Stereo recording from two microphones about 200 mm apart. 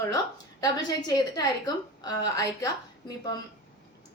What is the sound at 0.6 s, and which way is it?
A woman's voice, 20° left (ahead or behind).